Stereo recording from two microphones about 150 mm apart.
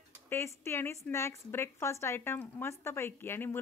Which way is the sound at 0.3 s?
15° left (ahead or behind).